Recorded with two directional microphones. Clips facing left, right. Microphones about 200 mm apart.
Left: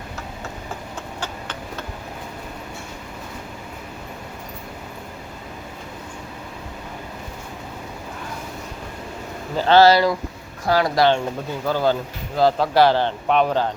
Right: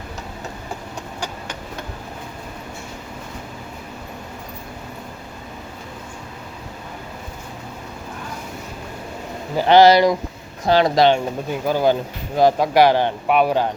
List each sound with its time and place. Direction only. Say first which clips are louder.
9.6 s speech: right 2 dB; 15° right (ahead or behind)